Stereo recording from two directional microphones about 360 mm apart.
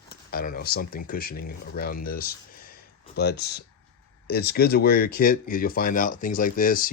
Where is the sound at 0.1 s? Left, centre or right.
Left.